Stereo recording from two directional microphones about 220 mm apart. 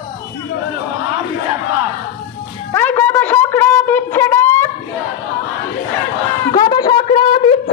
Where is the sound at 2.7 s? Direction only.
10° left (ahead or behind).